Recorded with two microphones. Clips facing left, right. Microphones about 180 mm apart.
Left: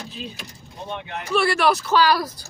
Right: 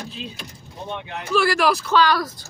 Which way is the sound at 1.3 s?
Centre (ahead or behind).